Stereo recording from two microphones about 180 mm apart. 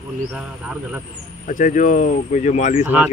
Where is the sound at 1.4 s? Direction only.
45° left (ahead or behind).